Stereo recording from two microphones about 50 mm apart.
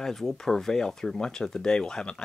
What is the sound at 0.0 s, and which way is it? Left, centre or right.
Speech, centre.